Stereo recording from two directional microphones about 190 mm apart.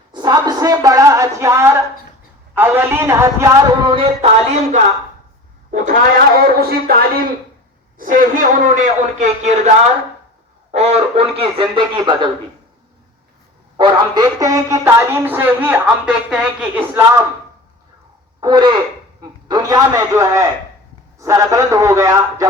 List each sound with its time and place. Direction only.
0.1 s a sound: 20° right (ahead or behind)
2.6 s speech: 10° right (ahead or behind)
3.9 s a man's voice: 30° right (ahead or behind)
6.6 s a man's voice: 55° right (ahead or behind); by 9.6 s 40° right (ahead or behind)
10.7 s a man's voice: 35° right (ahead or behind)
13.7 s speech: 25° right (ahead or behind)
18.3 s speech: 20° right (ahead or behind)